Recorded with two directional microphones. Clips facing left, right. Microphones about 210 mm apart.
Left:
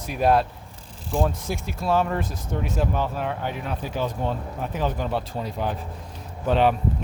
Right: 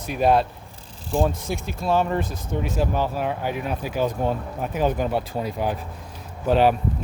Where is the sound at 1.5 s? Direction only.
Centre (ahead or behind).